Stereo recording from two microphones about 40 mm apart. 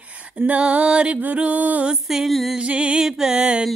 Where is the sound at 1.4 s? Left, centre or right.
Right.